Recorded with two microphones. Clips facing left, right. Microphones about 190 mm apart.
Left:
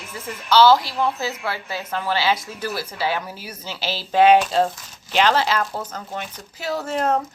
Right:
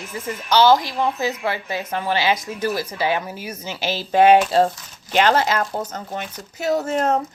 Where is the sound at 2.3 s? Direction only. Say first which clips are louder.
Right 5 dB; 45° right (ahead or behind).